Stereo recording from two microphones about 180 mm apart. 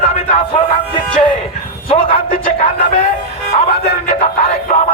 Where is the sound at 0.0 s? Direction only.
35° left (ahead or behind).